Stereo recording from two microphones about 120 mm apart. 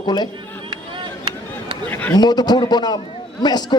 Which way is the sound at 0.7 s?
45° right (ahead or behind).